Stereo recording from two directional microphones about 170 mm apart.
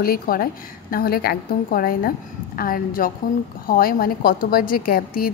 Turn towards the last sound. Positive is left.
turn(degrees=60)  # may be behind; listen again after turning